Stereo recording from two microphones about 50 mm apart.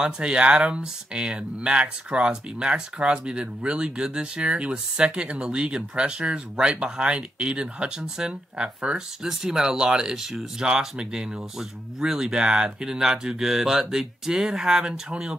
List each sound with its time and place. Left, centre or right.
0.0 s speech: right